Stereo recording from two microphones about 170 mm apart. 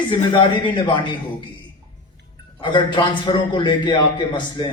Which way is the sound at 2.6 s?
30° left (ahead or behind).